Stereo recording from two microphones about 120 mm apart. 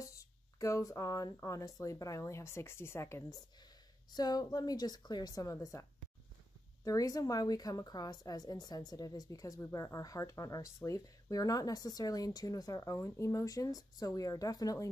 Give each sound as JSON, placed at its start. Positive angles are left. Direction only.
{"t": 0.0, "sound": "speech", "side_deg": 25}
{"t": 4.1, "sound": "a woman's voice", "side_deg": 30}